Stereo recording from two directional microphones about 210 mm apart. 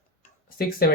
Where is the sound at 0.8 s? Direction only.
45° left (ahead or behind).